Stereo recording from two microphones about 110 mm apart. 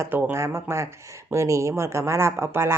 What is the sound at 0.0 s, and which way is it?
Speech, 20° right (ahead or behind).